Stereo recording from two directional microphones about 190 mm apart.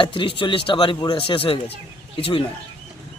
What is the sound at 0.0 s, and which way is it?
Speech, 25° left (ahead or behind).